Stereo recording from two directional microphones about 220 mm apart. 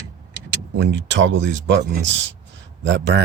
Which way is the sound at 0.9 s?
55° right (ahead or behind).